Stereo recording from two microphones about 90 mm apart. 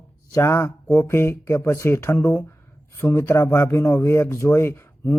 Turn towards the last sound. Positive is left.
turn(degrees=25)  # may be behind; listen again after turning